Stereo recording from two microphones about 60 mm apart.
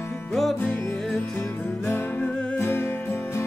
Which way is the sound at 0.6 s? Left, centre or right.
Left.